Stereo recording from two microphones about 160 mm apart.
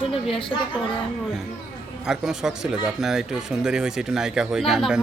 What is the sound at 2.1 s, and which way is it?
Speech, 5° right (ahead or behind).